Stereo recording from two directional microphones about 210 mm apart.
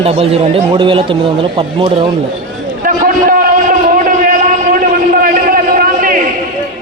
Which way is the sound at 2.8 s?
40° right (ahead or behind).